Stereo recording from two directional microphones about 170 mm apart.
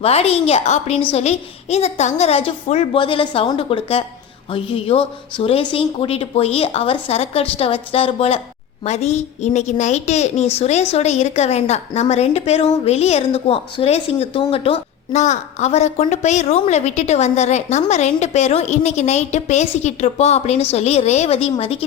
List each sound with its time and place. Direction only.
0.0 s a woman's voice: 35° left (ahead or behind)